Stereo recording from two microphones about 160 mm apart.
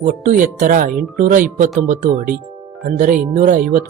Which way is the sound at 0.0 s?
55° right (ahead or behind).